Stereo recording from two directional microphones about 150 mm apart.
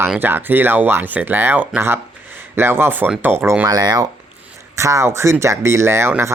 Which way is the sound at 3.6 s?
25° right (ahead or behind).